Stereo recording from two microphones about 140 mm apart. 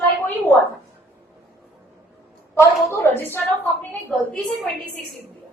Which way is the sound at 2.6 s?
20° left (ahead or behind).